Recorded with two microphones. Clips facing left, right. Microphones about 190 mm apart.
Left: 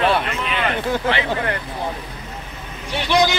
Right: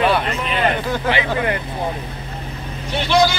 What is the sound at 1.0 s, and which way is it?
Speech, 15° right (ahead or behind).